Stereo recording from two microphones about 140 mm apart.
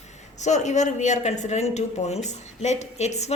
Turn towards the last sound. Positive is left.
turn(degrees=50)  # may be behind; listen again after turning